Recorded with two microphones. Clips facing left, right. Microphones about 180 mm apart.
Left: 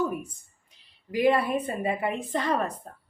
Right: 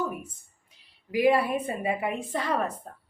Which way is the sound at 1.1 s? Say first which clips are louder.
Even; 5° right (ahead or behind).